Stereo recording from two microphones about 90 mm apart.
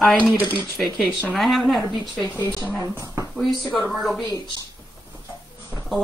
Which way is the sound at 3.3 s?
Centre (ahead or behind).